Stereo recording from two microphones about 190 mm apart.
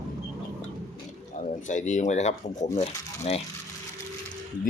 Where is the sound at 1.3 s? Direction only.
40° left (ahead or behind).